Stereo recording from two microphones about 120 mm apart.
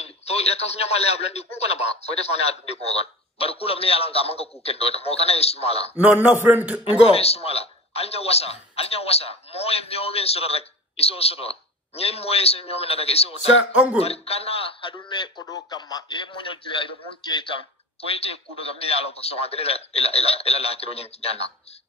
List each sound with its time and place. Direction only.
0.0 s a man's voice: 60° left (ahead or behind)
5.9 s a man's voice: 10° right (ahead or behind)
7.1 s a man's voice: 55° left (ahead or behind); by 17.6 s 40° left (ahead or behind)
18.0 s a man's voice: 55° left (ahead or behind)